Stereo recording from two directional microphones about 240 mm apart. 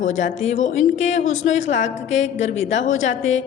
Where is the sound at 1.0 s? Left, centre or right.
Left.